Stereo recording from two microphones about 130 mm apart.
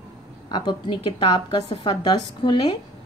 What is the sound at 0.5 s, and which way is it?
A woman's voice, 35° left (ahead or behind).